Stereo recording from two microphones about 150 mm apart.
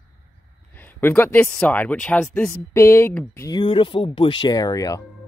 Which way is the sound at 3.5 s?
35° left (ahead or behind).